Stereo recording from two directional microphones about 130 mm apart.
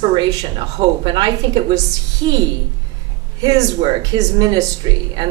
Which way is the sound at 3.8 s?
30° right (ahead or behind).